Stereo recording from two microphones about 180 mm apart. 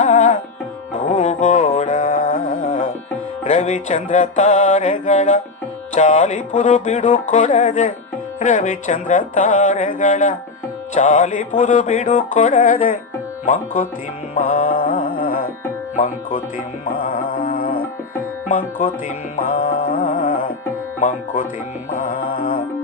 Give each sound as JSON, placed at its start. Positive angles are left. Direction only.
{"t": 0.0, "sound": "music", "side_deg": 45}
{"t": 16.0, "sound": "speech", "side_deg": 45}
{"t": 16.8, "sound": "music", "side_deg": 50}